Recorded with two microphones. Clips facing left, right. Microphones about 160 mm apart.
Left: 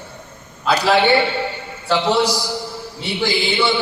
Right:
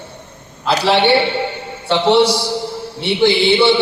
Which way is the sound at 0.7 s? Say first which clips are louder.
Right 2 dB; 25° right (ahead or behind).